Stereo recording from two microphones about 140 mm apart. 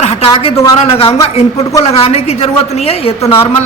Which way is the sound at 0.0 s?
45° left (ahead or behind).